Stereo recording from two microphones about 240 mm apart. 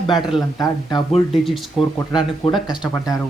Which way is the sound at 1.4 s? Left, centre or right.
Centre.